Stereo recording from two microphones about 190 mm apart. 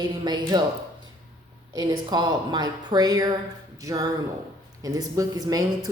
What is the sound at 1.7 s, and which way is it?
Speech, 20° right (ahead or behind).